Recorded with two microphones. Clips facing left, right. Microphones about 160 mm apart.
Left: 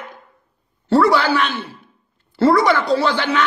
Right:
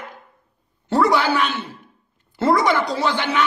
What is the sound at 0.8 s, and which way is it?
Speech, 15° right (ahead or behind).